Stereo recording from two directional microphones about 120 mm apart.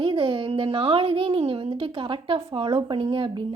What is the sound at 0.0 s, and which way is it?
A woman's voice, 45° right (ahead or behind).